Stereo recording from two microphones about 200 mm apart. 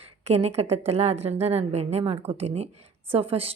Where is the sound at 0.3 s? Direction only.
30° right (ahead or behind).